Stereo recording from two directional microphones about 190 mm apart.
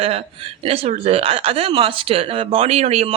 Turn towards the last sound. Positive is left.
turn(degrees=-35)  # may be behind; listen again after turning